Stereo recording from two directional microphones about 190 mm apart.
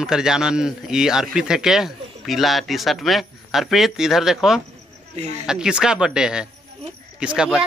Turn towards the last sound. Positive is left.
turn(degrees=-5)  # may be behind; listen again after turning